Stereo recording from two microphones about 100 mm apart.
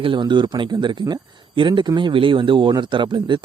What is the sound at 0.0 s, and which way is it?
Speech, 55° right (ahead or behind).